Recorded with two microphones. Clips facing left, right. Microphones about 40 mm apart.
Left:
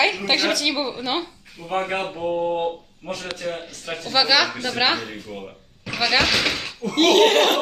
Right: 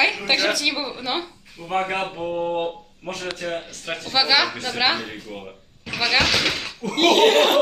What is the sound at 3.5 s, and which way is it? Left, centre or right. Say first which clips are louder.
Speech: right 1 dB; right.